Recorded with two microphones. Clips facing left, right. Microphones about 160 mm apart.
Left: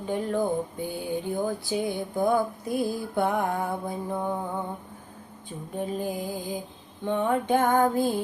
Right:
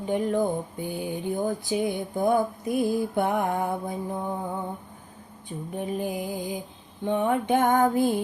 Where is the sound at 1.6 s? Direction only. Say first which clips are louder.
Right 2 dB; 20° right (ahead or behind).